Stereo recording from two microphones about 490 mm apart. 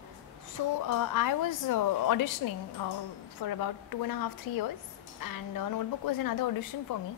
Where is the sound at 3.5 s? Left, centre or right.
Left.